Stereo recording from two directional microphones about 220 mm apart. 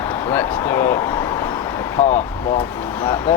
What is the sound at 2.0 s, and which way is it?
Speech, 30° left (ahead or behind).